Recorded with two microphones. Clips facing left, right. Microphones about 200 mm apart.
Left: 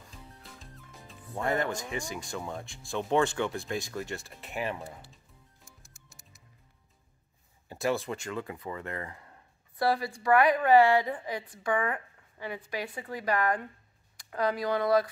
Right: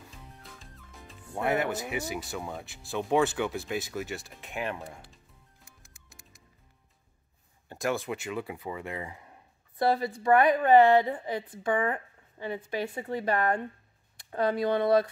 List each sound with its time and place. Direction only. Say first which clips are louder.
0.4 s music: even; centre (ahead or behind)
1.3 s speech: right 2 dB; 10° right (ahead or behind)
5.7 s music: even; 55° right (ahead or behind)
7.6 s a woman's voice: left 1 dB; 5° left (ahead or behind); by 15.0 s 25° right (ahead or behind)